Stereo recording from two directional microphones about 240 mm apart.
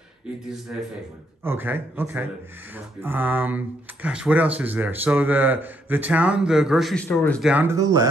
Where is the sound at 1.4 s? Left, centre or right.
Centre.